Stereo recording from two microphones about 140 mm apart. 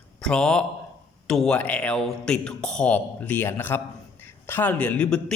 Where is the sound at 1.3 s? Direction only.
5° left (ahead or behind).